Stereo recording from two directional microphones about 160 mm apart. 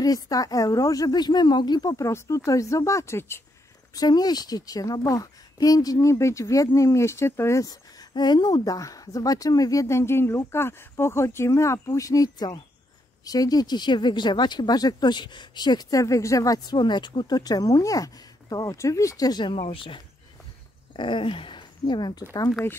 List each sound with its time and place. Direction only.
0.0 s speech: 20° left (ahead or behind)
19.5 s speech: 35° left (ahead or behind)
22.5 s speech: 10° left (ahead or behind)